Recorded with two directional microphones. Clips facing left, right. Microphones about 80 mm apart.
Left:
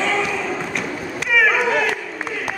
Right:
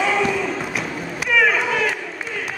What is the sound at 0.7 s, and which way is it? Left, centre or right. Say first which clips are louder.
Thump: left 1 dB; centre.